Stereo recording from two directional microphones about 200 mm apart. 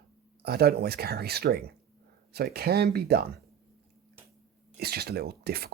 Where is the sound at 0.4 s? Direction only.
50° right (ahead or behind).